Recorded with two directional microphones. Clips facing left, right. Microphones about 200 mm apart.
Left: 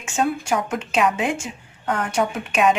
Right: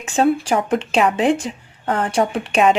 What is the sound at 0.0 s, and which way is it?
A woman's voice, 35° right (ahead or behind).